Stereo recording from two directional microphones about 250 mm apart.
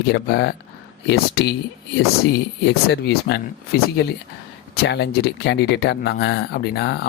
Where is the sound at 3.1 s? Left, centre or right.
Left.